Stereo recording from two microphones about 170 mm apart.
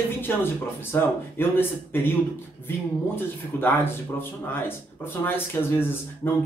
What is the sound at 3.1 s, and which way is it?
Speech, 10° left (ahead or behind).